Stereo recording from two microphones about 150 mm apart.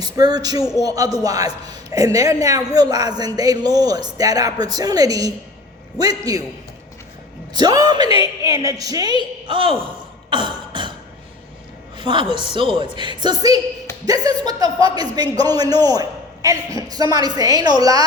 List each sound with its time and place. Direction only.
0.0 s a man's voice: 25° right (ahead or behind)
7.5 s a man's voice: 25° right (ahead or behind)
8.4 s a sound: 25° right (ahead or behind)
11.9 s a woman's voice: 30° right (ahead or behind)